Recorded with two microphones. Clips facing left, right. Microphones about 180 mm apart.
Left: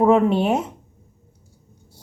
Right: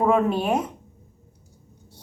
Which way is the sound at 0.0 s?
25° left (ahead or behind).